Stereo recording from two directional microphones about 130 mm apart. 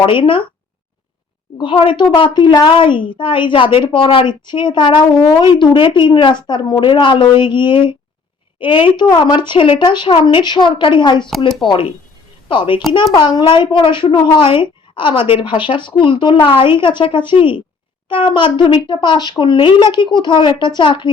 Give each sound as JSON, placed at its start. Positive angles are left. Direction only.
{"t": 0.0, "sound": "a woman's voice", "side_deg": 40}
{"t": 1.5, "sound": "a woman's voice", "side_deg": 40}